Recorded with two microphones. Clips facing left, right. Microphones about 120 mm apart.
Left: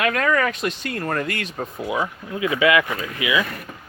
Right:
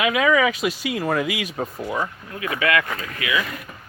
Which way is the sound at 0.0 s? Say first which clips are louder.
Right 2 dB; 5° right (ahead or behind).